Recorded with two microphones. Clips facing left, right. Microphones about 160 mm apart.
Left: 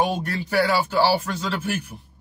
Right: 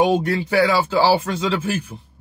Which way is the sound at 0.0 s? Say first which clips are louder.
Right 6 dB; 90° right.